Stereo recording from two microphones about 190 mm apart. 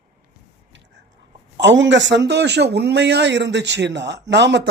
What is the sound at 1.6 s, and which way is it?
Speech, 70° right (ahead or behind).